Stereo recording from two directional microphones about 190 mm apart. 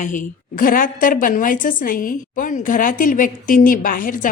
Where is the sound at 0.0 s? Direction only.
40° left (ahead or behind).